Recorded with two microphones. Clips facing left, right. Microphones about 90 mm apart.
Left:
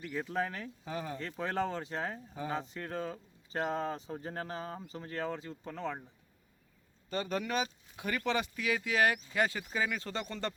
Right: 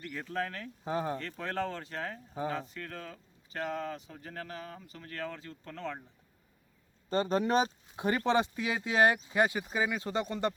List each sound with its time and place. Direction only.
0.0 s speech: 10° left (ahead or behind)
0.9 s speech: 35° right (ahead or behind)
1.2 s speech: 15° left (ahead or behind)
7.1 s speech: 30° right (ahead or behind); by 10.5 s 15° right (ahead or behind)